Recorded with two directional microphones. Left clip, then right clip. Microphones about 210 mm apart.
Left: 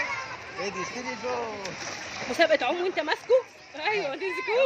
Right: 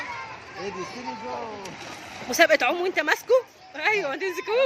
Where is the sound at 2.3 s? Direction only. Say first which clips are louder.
Right 4 dB; 10° right (ahead or behind).